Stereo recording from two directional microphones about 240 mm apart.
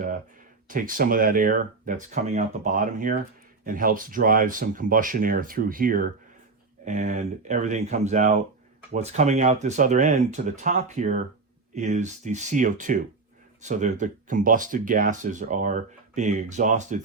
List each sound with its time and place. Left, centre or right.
0.7 s speech: right